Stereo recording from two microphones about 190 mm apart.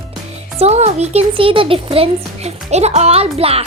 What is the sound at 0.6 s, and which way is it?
Speech, 35° right (ahead or behind).